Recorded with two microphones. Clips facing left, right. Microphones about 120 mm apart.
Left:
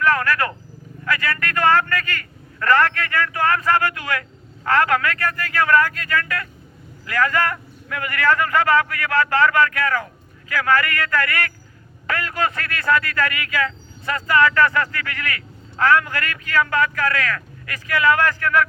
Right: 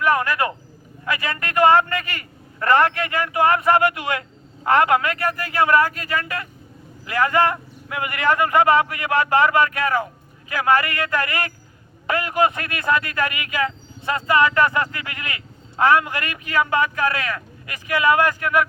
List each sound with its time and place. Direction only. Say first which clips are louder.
0.0 s vehicle: even; 15° right (ahead or behind)
1.0 s a man's voice: left 2 dB; 20° right (ahead or behind)